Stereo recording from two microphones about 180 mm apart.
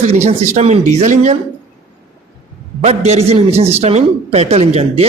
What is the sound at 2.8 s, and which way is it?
A man's voice, 35° right (ahead or behind).